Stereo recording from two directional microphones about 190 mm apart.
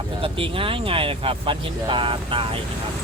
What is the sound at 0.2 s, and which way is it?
Speech, 30° right (ahead or behind).